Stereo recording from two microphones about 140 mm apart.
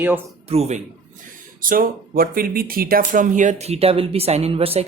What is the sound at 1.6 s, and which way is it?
Speech, 85° right.